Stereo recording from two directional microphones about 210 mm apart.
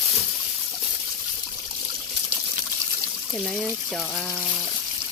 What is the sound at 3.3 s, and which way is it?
Speech, centre (ahead or behind).